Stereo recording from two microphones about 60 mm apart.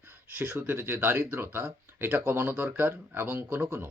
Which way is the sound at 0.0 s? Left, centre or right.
Right.